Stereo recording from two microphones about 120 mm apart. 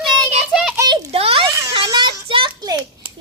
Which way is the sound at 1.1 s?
55° right (ahead or behind).